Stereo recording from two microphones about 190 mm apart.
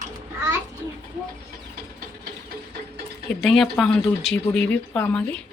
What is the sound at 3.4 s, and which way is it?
Speech, centre (ahead or behind).